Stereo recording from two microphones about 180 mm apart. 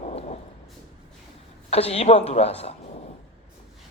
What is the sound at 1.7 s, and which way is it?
A woman's voice, 35° left (ahead or behind).